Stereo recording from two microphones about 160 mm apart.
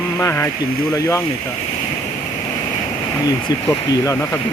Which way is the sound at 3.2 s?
20° left (ahead or behind).